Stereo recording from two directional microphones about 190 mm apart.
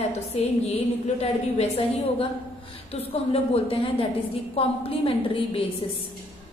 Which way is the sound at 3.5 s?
30° left (ahead or behind).